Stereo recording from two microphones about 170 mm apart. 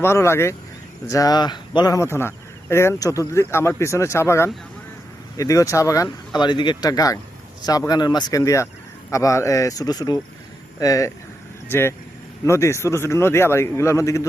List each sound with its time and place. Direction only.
0.0 s speech: 15° left (ahead or behind)